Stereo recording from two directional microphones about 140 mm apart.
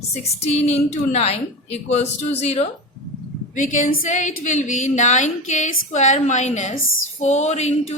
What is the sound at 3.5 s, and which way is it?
A woman's voice, 65° left (ahead or behind).